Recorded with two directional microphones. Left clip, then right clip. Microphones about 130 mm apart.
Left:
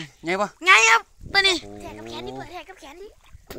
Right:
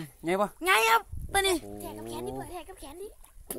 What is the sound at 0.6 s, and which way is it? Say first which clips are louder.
Speech: left 9 dB; 45° right (ahead or behind).